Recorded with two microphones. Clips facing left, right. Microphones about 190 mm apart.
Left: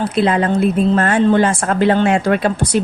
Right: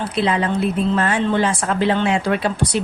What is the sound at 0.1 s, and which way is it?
Speech, 50° left (ahead or behind).